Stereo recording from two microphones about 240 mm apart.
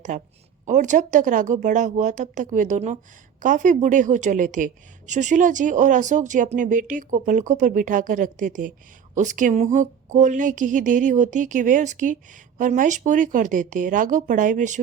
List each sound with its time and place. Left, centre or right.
0.1 s a woman's voice: right